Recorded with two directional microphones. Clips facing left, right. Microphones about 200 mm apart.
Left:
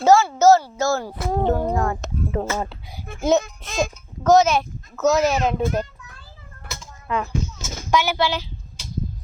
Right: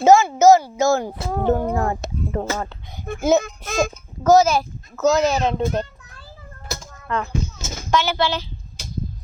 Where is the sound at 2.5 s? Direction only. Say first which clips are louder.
Left 1 dB; 10° left (ahead or behind).